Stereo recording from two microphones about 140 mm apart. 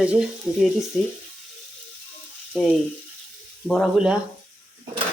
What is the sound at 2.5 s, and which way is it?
Frying, 5° left (ahead or behind).